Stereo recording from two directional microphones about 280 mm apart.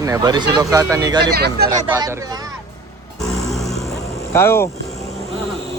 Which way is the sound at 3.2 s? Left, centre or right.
Centre.